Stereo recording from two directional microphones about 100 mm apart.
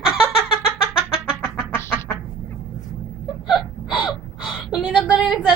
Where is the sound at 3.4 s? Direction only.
Centre (ahead or behind).